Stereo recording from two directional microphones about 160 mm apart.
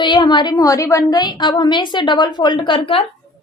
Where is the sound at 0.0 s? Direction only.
25° left (ahead or behind).